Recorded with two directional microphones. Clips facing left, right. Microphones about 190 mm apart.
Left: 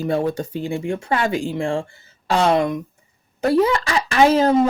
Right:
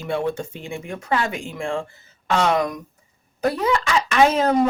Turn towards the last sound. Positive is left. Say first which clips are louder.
# left 2 dB
turn(degrees=30)  # may be behind; listen again after turning